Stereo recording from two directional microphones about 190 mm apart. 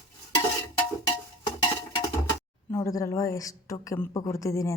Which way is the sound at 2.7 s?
15° left (ahead or behind).